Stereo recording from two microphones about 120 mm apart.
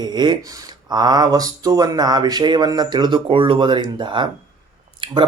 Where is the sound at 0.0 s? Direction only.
35° right (ahead or behind).